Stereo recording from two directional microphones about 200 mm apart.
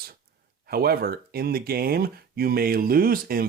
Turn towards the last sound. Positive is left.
turn(degrees=-45)  # may be behind; listen again after turning